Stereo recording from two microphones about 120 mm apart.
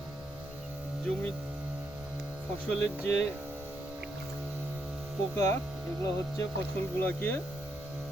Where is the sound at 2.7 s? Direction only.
15° left (ahead or behind).